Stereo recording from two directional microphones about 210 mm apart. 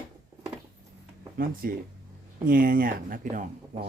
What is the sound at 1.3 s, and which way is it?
Speech, 45° right (ahead or behind).